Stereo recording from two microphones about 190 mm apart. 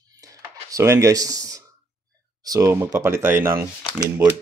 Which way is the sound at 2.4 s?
20° right (ahead or behind).